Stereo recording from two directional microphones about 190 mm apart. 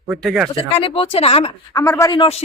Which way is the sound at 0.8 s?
30° left (ahead or behind).